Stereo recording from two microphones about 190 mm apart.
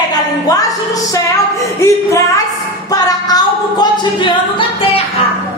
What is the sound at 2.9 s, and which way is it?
Singing, 20° left (ahead or behind).